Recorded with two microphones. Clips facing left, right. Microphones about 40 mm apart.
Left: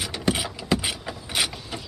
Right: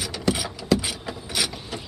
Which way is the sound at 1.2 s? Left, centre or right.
Centre.